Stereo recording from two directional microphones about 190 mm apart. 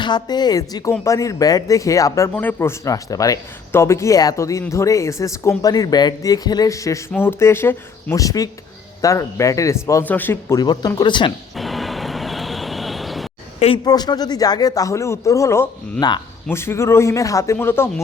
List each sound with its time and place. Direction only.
0.0 s speech: 20° left (ahead or behind)
11.5 s vehicle: centre (ahead or behind)
13.8 s speech: 20° left (ahead or behind)